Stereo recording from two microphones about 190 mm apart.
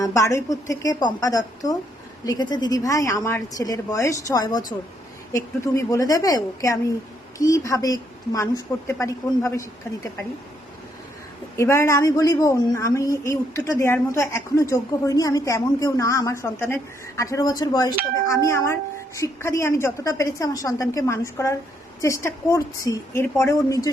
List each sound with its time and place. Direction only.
0.0 s a woman's voice: 15° left (ahead or behind)
11.5 s speech: 15° left (ahead or behind)